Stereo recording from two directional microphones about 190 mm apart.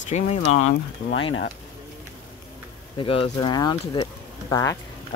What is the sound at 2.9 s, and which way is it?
Speech, 30° left (ahead or behind).